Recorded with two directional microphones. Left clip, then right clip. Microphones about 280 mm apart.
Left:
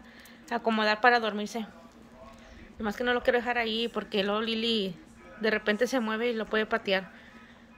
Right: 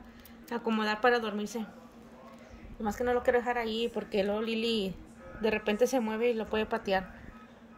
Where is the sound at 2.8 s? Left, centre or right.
Centre.